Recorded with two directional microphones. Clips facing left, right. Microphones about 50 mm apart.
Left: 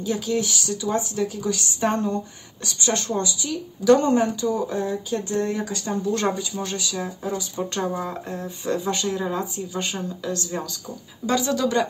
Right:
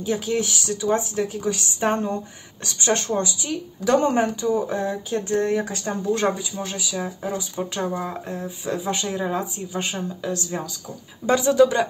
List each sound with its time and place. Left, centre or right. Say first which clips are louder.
0.0 s speech: right 1 dB; right
6.0 s speech: right 2 dB; centre
7.7 s speech: even; centre